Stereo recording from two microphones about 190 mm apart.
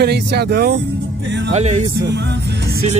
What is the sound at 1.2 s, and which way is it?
Music, 70° right (ahead or behind).